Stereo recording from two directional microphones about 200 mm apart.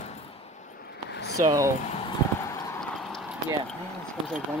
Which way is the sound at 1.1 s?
60° left (ahead or behind).